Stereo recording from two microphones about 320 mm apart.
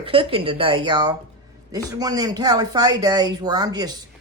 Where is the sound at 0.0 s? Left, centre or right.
Centre.